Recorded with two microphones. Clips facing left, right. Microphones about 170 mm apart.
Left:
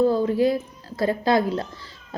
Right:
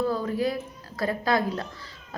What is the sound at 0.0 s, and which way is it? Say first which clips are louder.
Speech: left 7 dB; 25° left (ahead or behind).